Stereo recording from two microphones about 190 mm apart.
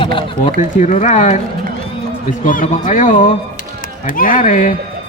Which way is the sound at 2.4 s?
45° left (ahead or behind).